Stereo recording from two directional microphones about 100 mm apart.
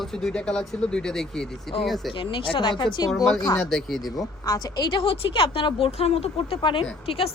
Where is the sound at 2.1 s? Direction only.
60° left (ahead or behind).